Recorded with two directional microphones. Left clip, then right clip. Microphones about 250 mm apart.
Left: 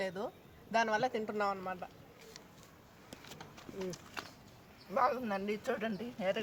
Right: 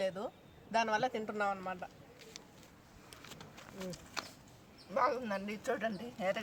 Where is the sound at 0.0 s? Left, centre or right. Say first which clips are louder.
Right 1 dB; centre.